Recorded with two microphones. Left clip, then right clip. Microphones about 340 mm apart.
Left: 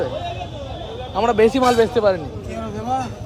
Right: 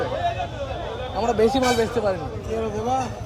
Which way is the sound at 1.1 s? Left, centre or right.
Left.